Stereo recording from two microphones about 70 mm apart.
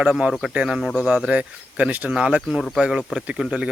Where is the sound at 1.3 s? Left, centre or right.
Right.